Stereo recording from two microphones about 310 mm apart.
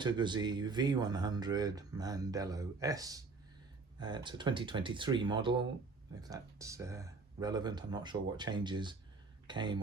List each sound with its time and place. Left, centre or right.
0.0 s speech: centre